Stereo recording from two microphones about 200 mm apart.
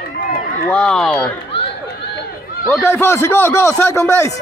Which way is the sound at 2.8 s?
10° left (ahead or behind).